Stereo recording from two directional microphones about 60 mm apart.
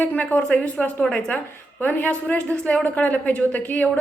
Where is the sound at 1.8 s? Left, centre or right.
Left.